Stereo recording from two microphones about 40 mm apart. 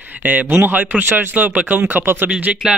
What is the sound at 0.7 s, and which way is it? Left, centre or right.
Speech, right.